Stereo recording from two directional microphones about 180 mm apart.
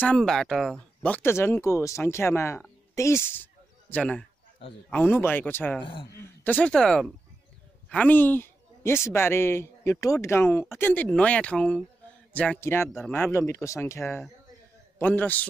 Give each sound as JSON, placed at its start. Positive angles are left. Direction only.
{"t": 0.1, "sound": "speech", "side_deg": 0}
{"t": 5.8, "sound": "a man's voice", "side_deg": 30}
{"t": 6.1, "sound": "speech", "side_deg": 10}